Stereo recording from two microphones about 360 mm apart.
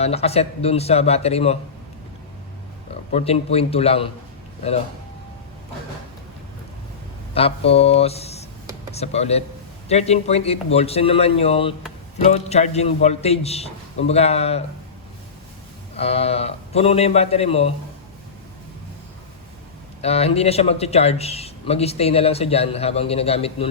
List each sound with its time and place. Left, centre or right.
0.0 s speech: centre
3.1 s speech: centre
7.3 s speech: centre
16.0 s speech: centre
20.0 s speech: centre